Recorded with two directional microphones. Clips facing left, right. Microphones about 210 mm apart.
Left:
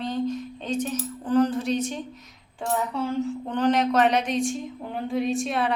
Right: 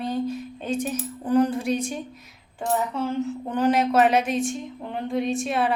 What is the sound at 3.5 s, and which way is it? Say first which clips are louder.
A woman's voice: right 1 dB; 5° right (ahead or behind).